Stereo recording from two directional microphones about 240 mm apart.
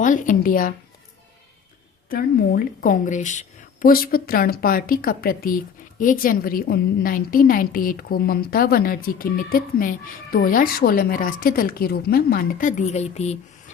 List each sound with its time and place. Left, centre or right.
0.0 s a woman's voice: left
2.0 s a woman's voice: left